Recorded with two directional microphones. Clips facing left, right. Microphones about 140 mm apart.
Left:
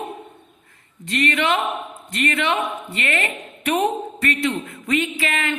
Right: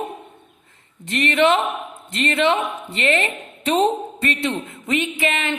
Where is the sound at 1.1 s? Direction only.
25° right (ahead or behind).